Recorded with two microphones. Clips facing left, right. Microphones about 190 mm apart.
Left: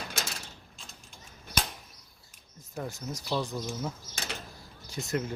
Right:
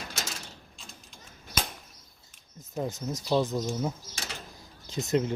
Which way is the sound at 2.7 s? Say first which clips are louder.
Right 5 dB; 20° right (ahead or behind).